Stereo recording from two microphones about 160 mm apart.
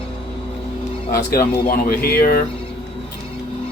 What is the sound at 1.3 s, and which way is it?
Speech, 65° left (ahead or behind).